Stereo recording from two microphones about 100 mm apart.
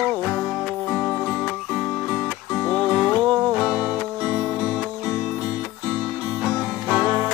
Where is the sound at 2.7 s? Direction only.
5° left (ahead or behind).